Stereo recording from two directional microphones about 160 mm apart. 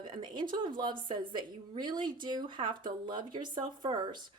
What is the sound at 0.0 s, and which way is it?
Speech, 30° right (ahead or behind).